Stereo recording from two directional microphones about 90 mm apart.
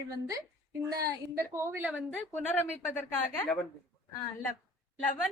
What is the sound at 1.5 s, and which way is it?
Speech, 30° right (ahead or behind).